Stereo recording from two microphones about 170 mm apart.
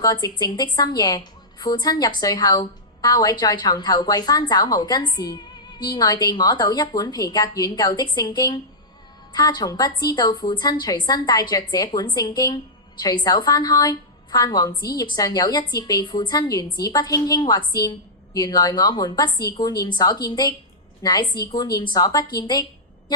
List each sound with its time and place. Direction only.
0.0 s a woman's voice: 25° left (ahead or behind)